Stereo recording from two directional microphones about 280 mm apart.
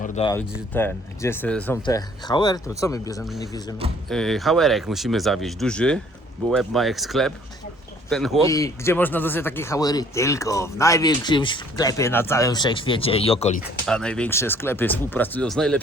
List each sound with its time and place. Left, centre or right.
0.0 s a sound: centre
0.5 s speech: centre
4.1 s speech: centre
13.6 s speech: centre